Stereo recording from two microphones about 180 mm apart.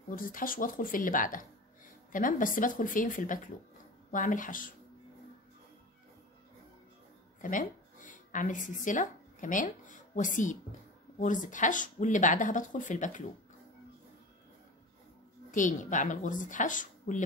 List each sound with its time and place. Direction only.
0.1 s speech: 50° left (ahead or behind)
7.4 s speech: 45° left (ahead or behind)
15.5 s speech: 45° left (ahead or behind)